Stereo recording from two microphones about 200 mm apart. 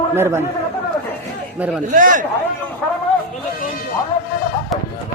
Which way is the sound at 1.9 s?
40° right (ahead or behind).